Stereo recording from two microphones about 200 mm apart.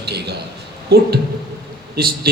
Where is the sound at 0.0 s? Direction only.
55° right (ahead or behind).